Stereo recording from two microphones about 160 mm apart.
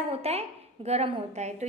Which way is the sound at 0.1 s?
40° right (ahead or behind).